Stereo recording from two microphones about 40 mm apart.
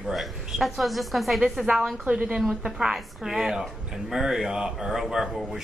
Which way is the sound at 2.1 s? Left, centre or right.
Right.